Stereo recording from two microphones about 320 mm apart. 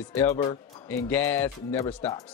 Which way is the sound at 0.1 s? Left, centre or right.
Centre.